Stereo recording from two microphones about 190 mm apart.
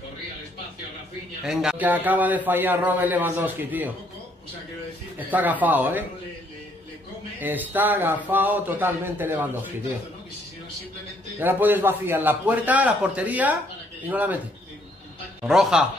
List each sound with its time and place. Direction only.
1.4 s a man's voice: 5° right (ahead or behind)
5.3 s a man's voice: 10° right (ahead or behind)
7.3 s a man's voice: 10° right (ahead or behind)
11.3 s a man's voice: 10° right (ahead or behind)
15.4 s speech: centre (ahead or behind)